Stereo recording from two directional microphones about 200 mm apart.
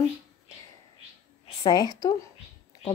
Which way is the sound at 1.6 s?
20° left (ahead or behind).